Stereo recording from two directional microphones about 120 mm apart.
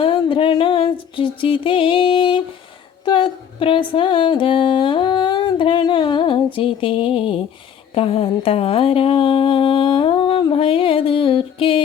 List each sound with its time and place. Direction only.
0.0 s music: 45° left (ahead or behind)